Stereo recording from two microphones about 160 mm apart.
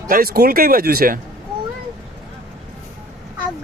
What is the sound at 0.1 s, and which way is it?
Speech, 65° right (ahead or behind).